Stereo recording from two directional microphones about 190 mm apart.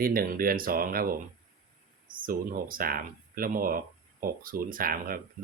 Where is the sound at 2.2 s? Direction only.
50° right (ahead or behind).